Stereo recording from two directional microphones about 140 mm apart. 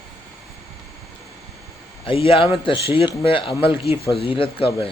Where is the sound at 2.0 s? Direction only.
40° left (ahead or behind).